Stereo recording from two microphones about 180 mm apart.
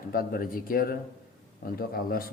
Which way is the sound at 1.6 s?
55° left (ahead or behind).